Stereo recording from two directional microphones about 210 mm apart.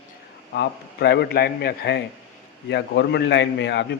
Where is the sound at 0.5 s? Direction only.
55° left (ahead or behind).